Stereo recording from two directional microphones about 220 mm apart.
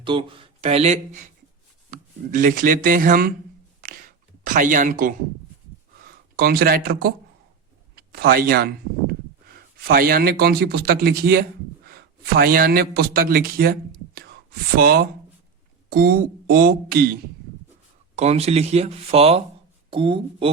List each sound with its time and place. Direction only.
0.0 s speech: 25° right (ahead or behind); by 3.3 s 40° right (ahead or behind)
3.8 s a sound: 40° right (ahead or behind)
4.4 s a man's voice: 35° right (ahead or behind)
14.8 s speech: 45° right (ahead or behind)
18.2 s speech: 30° right (ahead or behind)